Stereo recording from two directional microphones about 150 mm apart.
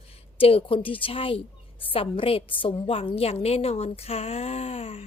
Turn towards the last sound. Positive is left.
turn(degrees=40)  # may be behind; listen again after turning